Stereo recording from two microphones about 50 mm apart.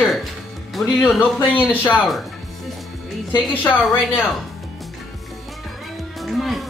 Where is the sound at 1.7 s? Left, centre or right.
Left.